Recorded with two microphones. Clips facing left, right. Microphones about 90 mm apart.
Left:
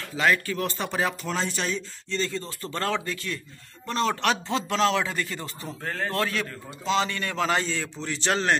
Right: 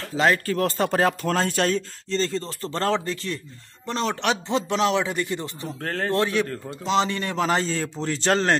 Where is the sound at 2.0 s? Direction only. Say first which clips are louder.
Right 3 dB; 30° right (ahead or behind).